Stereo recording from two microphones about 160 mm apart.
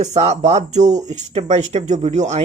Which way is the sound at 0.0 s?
45° right (ahead or behind).